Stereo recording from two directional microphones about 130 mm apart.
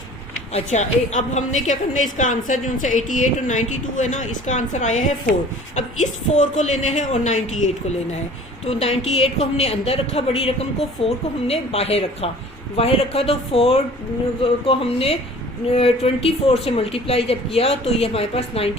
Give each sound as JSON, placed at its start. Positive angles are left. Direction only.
{"t": 0.5, "sound": "a woman's voice", "side_deg": 65}
{"t": 8.6, "sound": "a woman's voice", "side_deg": 50}